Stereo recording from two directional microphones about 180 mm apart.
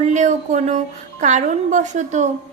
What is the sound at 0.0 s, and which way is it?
A woman's voice, 40° right (ahead or behind).